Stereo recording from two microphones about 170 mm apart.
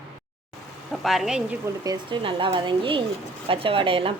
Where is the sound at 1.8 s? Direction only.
25° right (ahead or behind).